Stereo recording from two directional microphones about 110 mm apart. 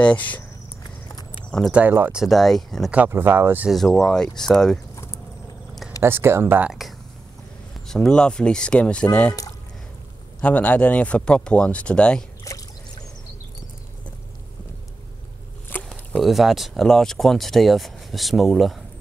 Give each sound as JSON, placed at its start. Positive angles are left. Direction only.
{"t": 0.0, "sound": "speech", "side_deg": 10}
{"t": 1.7, "sound": "speech", "side_deg": -15}
{"t": 2.1, "sound": "speech", "side_deg": 0}
{"t": 2.9, "sound": "speech", "side_deg": -15}
{"t": 3.7, "sound": "speech", "side_deg": 5}
{"t": 4.9, "sound": "a sound", "side_deg": 25}
{"t": 5.9, "sound": "speech", "side_deg": -20}
{"t": 7.8, "sound": "speech", "side_deg": 5}
{"t": 10.4, "sound": "speech", "side_deg": 15}
{"t": 15.7, "sound": "a sound", "side_deg": 20}
{"t": 16.2, "sound": "speech", "side_deg": 0}